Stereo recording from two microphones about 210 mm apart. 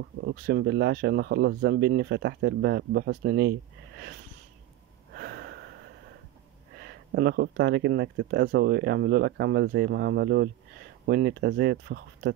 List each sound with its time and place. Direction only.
0.2 s speech: 45° right (ahead or behind)
5.1 s a sound: 50° right (ahead or behind)
6.8 s speech: 50° right (ahead or behind)